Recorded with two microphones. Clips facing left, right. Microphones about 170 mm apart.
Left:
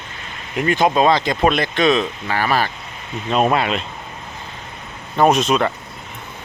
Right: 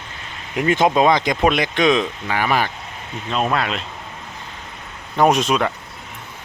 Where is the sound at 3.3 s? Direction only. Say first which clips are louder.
Left 4 dB; 15° left (ahead or behind).